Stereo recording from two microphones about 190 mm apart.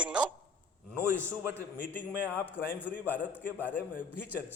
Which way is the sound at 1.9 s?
10° left (ahead or behind).